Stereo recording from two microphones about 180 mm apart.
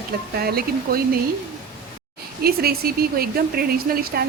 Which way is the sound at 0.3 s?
60° right (ahead or behind).